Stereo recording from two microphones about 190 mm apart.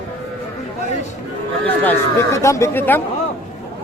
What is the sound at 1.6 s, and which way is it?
Speech, 10° left (ahead or behind).